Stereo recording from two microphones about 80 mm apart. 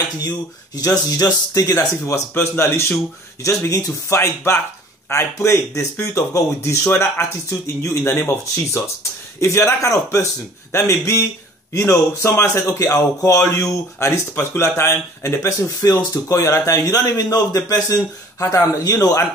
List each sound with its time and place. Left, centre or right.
0.7 s speech: left
8.0 s speech: left